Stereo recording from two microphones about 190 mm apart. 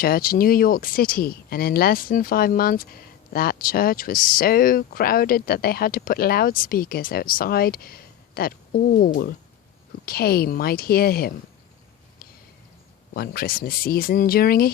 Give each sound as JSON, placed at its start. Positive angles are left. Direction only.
{"t": 0.0, "sound": "speech", "side_deg": 50}
{"t": 13.1, "sound": "speech", "side_deg": 50}